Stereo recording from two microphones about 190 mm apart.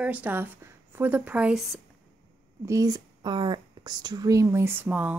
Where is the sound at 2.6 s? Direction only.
15° right (ahead or behind).